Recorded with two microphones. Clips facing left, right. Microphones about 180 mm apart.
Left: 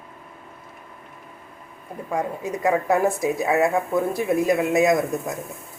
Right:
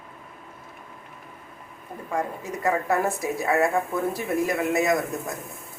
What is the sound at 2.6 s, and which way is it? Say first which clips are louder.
A woman's voice: left 4 dB; 15° left (ahead or behind).